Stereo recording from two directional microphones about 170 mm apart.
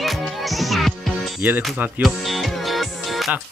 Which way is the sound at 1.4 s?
10° right (ahead or behind).